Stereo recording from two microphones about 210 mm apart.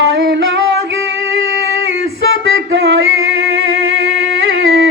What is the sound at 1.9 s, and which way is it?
Singing, 70° right (ahead or behind).